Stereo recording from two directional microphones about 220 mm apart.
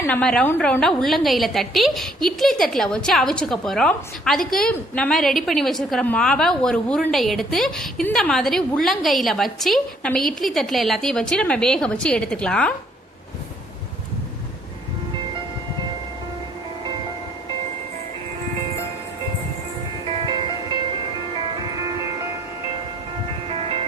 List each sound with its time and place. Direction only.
0.0 s a woman's voice: 5° left (ahead or behind)
20.1 s music: 20° right (ahead or behind)
23.5 s music: 25° right (ahead or behind)